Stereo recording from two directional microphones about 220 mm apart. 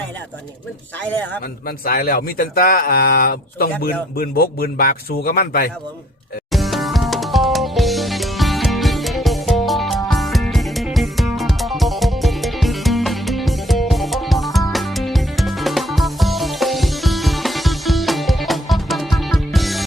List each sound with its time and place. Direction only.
1.0 s a man's voice: 10° left (ahead or behind)
1.6 s speech: 40° left (ahead or behind)
6.5 s music: centre (ahead or behind)